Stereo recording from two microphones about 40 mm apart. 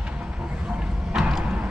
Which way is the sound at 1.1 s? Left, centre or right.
Centre.